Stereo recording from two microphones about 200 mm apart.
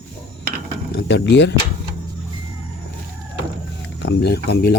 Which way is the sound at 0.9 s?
60° left (ahead or behind).